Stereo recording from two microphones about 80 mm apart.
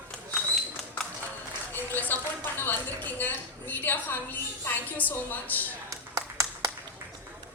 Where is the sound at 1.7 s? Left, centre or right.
Left.